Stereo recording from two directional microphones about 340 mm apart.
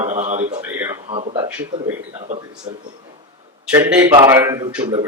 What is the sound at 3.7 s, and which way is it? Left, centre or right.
A man's voice, centre.